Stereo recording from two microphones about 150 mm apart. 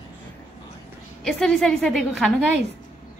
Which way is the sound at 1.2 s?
5° left (ahead or behind).